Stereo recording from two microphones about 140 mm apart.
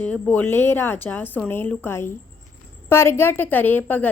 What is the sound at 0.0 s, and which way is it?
A woman's voice, 10° left (ahead or behind).